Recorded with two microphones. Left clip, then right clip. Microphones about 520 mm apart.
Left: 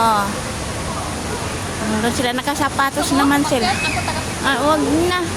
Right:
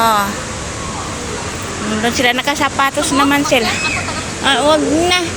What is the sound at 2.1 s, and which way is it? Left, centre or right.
Speech, left.